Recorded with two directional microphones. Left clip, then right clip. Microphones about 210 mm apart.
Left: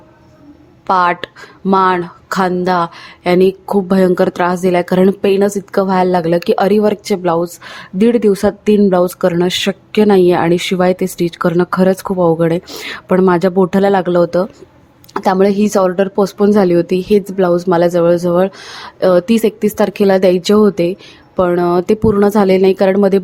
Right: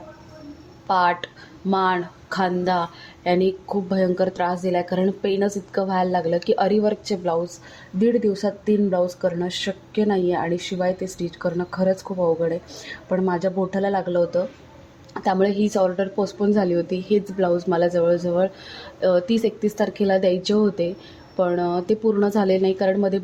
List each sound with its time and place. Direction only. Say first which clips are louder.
0.9 s speech: left 7 dB; 35° left (ahead or behind)